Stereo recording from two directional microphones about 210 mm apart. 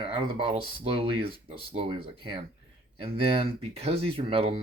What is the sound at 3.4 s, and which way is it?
Speech, 30° right (ahead or behind).